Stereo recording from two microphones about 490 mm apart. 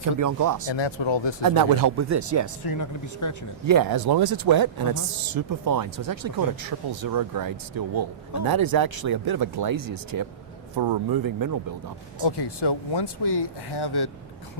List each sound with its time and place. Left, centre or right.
0.2 s speech: right
0.7 s speech: left
1.4 s speech: right
2.6 s speech: left
3.7 s speech: right
10.8 s speech: right
12.2 s speech: left